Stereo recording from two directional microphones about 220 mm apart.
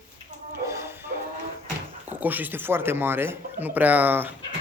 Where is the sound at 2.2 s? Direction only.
10° right (ahead or behind).